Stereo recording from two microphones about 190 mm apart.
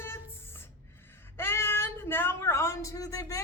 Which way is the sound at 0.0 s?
10° left (ahead or behind).